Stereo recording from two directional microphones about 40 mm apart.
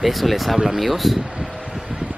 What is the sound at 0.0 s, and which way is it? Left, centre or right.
Speech, centre.